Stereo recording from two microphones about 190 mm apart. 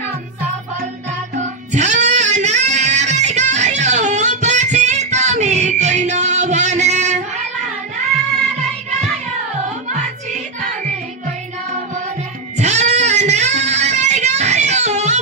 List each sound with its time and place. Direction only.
1.7 s music: 40° right (ahead or behind)
12.5 s child singing: 35° right (ahead or behind)